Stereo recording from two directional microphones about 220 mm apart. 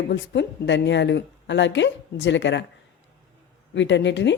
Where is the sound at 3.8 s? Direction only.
55° left (ahead or behind).